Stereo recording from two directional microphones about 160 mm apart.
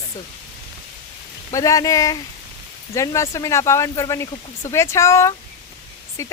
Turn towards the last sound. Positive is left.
turn(degrees=20)  # may be behind; listen again after turning